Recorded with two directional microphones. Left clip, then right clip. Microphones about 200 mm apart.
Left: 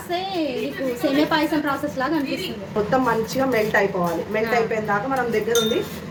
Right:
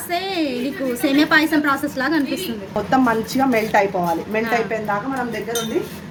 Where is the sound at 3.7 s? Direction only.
35° right (ahead or behind).